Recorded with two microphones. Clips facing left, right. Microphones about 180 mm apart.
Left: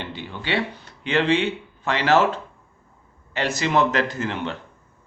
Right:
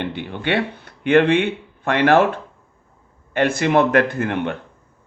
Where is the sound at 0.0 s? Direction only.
60° right (ahead or behind).